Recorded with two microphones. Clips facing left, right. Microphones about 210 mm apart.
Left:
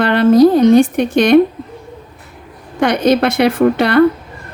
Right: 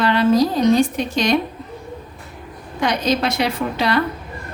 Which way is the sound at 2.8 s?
60° left (ahead or behind).